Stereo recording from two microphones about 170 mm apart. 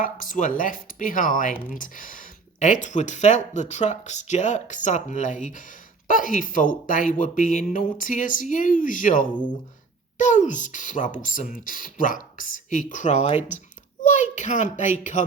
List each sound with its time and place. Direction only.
0.0 s speech: 50° left (ahead or behind)
1.5 s speech: 10° right (ahead or behind)
1.8 s a child's voice: 50° left (ahead or behind)